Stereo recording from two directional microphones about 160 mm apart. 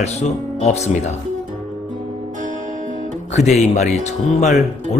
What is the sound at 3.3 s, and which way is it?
Speech, 45° left (ahead or behind).